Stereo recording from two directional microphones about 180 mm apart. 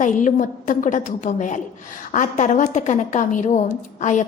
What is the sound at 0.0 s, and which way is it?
A woman's voice, 45° left (ahead or behind).